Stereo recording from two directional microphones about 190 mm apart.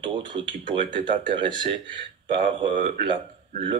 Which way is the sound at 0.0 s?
25° right (ahead or behind).